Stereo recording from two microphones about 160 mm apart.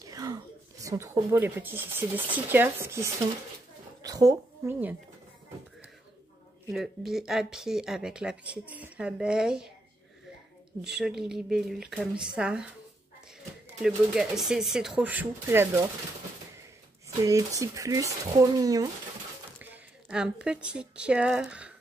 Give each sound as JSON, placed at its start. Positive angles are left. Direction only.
{"t": 0.0, "sound": "speech", "side_deg": -20}
{"t": 6.7, "sound": "speech", "side_deg": 0}
{"t": 10.8, "sound": "speech", "side_deg": 0}
{"t": 13.8, "sound": "speech", "side_deg": 0}
{"t": 17.2, "sound": "speech", "side_deg": -20}
{"t": 19.6, "sound": "a woman's voice", "side_deg": -10}